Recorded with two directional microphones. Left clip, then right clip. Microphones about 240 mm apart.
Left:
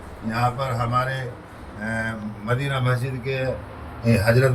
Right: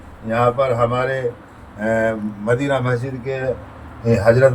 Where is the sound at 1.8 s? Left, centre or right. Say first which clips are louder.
Right 9 dB; right.